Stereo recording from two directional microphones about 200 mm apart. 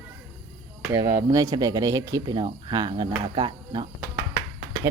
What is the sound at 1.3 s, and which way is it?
Speech, 15° right (ahead or behind).